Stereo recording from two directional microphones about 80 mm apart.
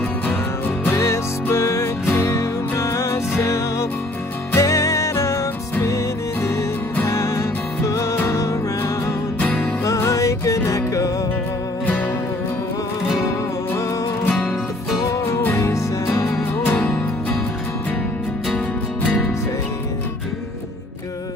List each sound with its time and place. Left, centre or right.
0.8 s music: left
7.1 s music: left
9.4 s music: centre
9.8 s music: left
14.2 s music: centre
15.0 s music: left
16.6 s music: left